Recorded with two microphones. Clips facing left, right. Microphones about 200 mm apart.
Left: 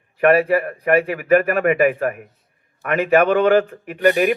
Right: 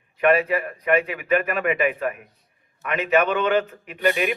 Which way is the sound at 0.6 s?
50° left (ahead or behind).